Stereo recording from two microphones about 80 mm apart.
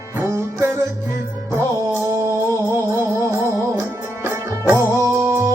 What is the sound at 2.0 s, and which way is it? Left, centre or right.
Music, right.